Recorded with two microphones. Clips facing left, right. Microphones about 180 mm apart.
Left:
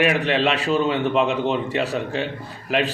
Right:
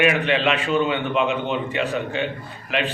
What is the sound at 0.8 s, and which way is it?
Speech, 40° left (ahead or behind).